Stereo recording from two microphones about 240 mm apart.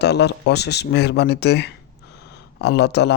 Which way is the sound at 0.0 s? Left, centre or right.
Left.